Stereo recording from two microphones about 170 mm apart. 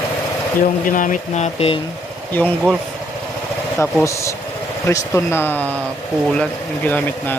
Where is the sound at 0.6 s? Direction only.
50° left (ahead or behind); by 1.8 s 35° left (ahead or behind).